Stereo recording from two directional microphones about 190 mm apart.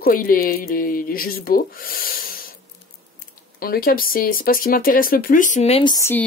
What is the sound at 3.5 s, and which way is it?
Speech, 50° left (ahead or behind).